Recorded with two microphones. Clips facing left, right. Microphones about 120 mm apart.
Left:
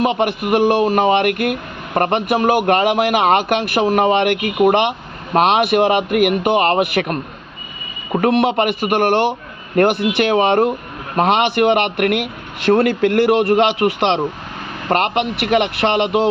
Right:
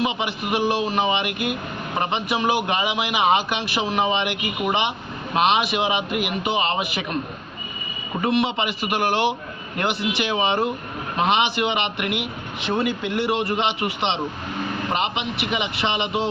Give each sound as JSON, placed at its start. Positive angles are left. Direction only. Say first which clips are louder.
{"t": 0.0, "sound": "a man's voice", "louder": "left 7 dB", "side_deg": 55}
{"t": 12.6, "sound": "a man's voice", "louder": "left 10 dB", "side_deg": 75}